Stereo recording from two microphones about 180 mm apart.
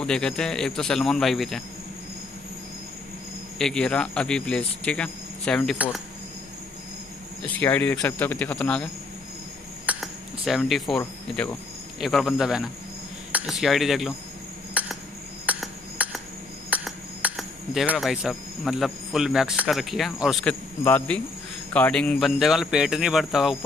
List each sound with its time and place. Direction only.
0.0 s speech: 5° left (ahead or behind)
3.5 s speech: 5° left (ahead or behind)
7.4 s speech: 10° left (ahead or behind)
9.8 s a sound: centre (ahead or behind)
11.0 s speech: 15° left (ahead or behind)
12.0 s speech: centre (ahead or behind)
14.7 s cricket: 10° right (ahead or behind)
15.4 s a sound: 5° right (ahead or behind)
16.7 s speech: 5° right (ahead or behind)